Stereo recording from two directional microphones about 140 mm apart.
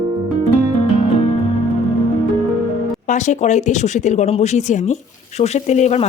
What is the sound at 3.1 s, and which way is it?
Speech, 60° left (ahead or behind).